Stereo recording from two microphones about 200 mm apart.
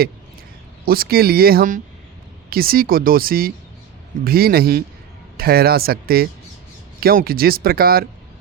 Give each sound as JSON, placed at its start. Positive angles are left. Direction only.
{"t": 0.9, "sound": "speech", "side_deg": -50}